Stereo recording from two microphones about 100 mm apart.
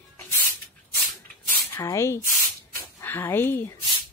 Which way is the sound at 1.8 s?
30° left (ahead or behind).